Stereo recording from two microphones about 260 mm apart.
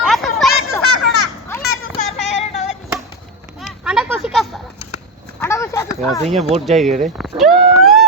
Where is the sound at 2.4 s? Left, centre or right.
Left.